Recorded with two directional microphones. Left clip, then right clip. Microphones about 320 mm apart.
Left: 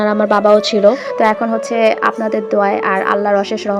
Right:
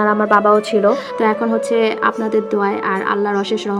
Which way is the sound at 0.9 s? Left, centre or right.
Centre.